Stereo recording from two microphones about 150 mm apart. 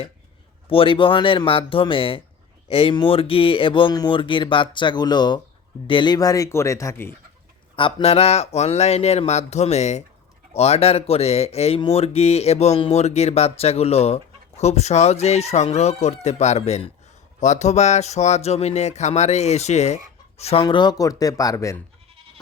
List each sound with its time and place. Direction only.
0.7 s speech: 35° left (ahead or behind); by 7.2 s 15° left (ahead or behind)
7.8 s speech: 35° left (ahead or behind)
20.7 s speech: 30° left (ahead or behind)